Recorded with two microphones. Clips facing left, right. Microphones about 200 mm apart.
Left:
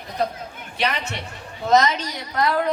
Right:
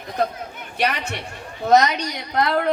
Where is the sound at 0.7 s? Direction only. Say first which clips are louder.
Right 2 dB; 60° right (ahead or behind).